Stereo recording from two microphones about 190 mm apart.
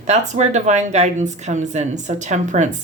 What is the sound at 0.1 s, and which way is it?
Speech, 35° right (ahead or behind).